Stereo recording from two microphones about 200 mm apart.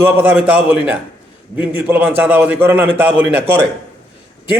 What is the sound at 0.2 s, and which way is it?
A man's voice, 5° right (ahead or behind).